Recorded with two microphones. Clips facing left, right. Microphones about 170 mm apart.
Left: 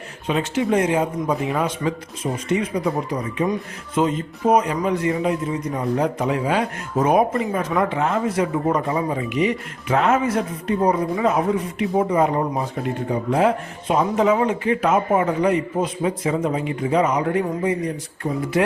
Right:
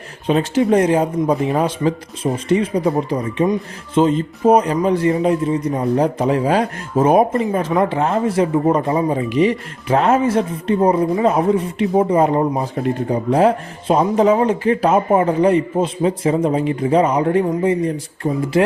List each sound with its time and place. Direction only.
0.3 s a man's voice: 35° right (ahead or behind)